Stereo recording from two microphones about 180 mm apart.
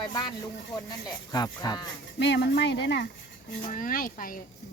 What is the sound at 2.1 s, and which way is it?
Speech, 70° left (ahead or behind).